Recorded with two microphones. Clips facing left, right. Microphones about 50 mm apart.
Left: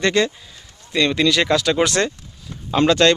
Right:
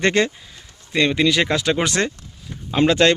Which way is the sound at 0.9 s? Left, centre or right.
Centre.